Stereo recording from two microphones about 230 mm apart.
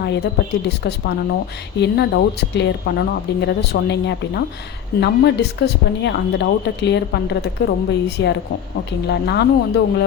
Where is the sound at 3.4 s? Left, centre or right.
Left.